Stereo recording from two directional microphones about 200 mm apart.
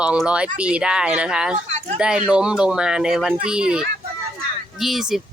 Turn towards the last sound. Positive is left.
turn(degrees=0)  # may be behind; listen again after turning